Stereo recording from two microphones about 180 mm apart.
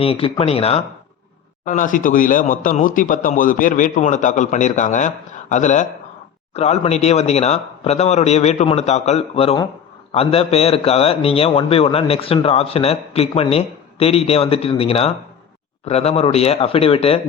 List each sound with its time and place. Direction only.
0.0 s a man's voice: 30° left (ahead or behind)
1.6 s a man's voice: 45° left (ahead or behind)